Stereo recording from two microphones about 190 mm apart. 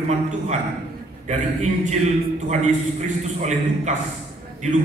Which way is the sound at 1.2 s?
35° right (ahead or behind).